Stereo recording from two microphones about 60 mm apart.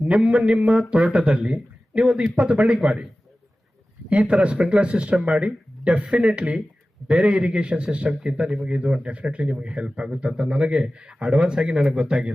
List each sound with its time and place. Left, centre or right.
0.0 s speech: centre
4.1 s speech: centre